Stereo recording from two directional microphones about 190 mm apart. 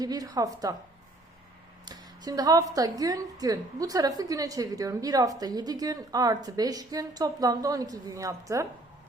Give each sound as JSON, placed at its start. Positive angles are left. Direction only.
{"t": 0.0, "sound": "a woman's voice", "side_deg": -20}
{"t": 1.8, "sound": "a woman's voice", "side_deg": -20}